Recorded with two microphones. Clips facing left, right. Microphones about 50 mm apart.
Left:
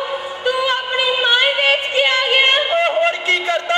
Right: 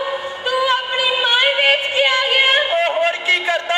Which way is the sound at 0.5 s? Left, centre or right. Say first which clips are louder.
Right 3 dB; centre.